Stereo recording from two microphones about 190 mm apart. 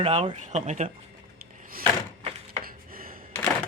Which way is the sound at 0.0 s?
30° right (ahead or behind).